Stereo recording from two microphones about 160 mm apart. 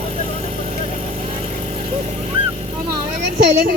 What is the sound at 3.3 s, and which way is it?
Speech, 90° right.